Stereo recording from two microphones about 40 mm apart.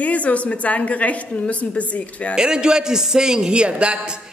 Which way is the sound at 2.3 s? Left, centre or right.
Centre.